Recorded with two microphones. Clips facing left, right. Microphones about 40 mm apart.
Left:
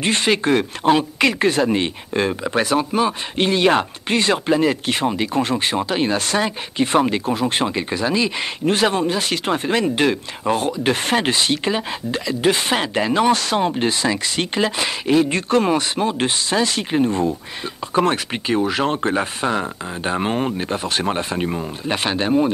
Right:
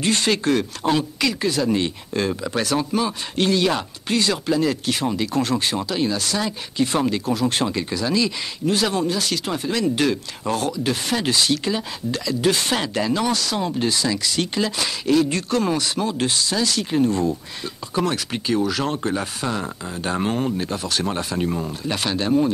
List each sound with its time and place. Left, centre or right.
0.0 s speech: left